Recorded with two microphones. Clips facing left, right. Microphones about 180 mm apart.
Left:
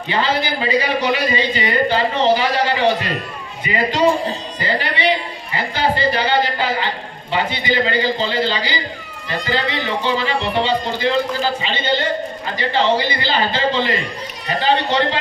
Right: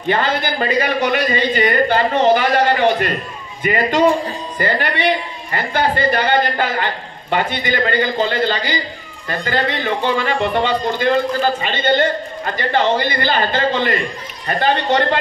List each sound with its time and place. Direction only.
0.1 s a man's voice: 50° right (ahead or behind)